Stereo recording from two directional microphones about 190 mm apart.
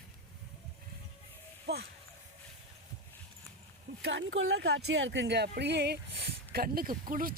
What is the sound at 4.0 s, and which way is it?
Speech, 75° right (ahead or behind).